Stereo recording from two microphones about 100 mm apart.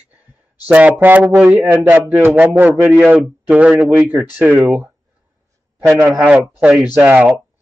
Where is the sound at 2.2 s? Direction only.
20° right (ahead or behind).